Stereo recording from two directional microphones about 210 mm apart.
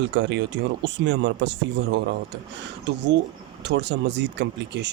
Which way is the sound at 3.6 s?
55° right (ahead or behind).